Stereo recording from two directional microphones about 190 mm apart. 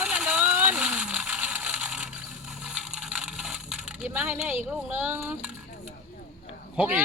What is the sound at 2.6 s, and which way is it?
Coin, 5° right (ahead or behind).